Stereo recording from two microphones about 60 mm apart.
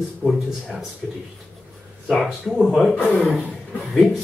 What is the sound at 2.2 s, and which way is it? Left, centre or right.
Speech, centre.